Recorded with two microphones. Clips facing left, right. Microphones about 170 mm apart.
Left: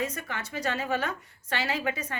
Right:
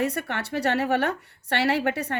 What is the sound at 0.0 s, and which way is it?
A woman's voice, 65° right (ahead or behind).